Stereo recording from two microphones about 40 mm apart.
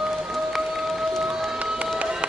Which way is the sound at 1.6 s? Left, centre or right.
Right.